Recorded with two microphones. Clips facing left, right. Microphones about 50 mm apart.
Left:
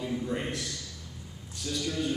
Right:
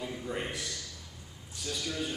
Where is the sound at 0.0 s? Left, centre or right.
Centre.